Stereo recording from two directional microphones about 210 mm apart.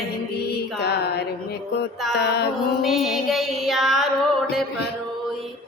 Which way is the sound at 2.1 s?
50° left (ahead or behind).